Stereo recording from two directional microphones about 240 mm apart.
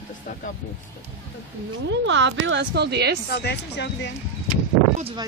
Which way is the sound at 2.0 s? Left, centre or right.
Right.